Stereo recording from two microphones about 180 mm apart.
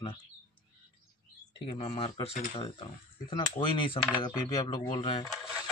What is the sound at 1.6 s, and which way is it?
Speech, 30° left (ahead or behind).